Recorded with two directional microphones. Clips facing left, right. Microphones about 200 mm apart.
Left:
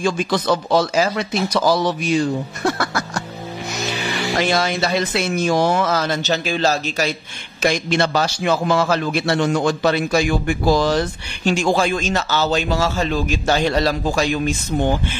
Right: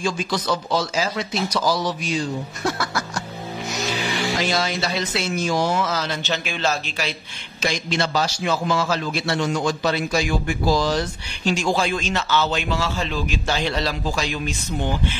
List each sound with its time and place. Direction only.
0.0 s a man's voice: 55° left (ahead or behind)
2.8 s music: 55° left (ahead or behind)
4.3 s a man's voice: 55° left (ahead or behind); by 7.2 s 40° left (ahead or behind)
7.6 s a man's voice: 55° left (ahead or behind)